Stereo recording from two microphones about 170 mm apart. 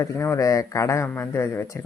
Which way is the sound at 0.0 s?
15° left (ahead or behind).